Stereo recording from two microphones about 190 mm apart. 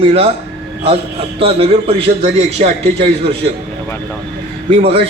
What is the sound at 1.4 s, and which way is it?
A man's voice, 30° right (ahead or behind).